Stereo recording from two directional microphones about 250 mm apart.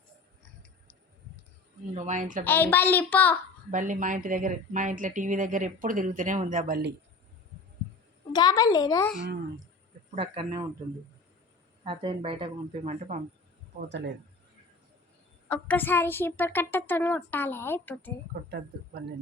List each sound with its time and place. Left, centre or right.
1.9 s speech: right
2.4 s speech: centre
3.7 s speech: right
8.3 s speech: centre
10.2 s speech: right
11.9 s speech: right
13.8 s speech: right
15.4 s speech: centre